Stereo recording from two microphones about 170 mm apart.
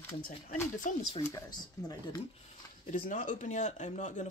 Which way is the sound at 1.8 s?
20° left (ahead or behind).